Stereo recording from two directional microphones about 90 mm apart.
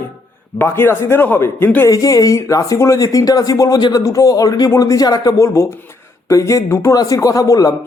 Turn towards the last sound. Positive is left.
turn(degrees=40)  # may be behind; listen again after turning